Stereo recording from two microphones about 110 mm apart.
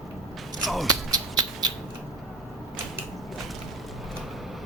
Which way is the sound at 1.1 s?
35° right (ahead or behind).